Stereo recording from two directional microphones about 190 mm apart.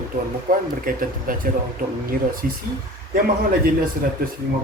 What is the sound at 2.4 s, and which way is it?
Speech, 50° right (ahead or behind).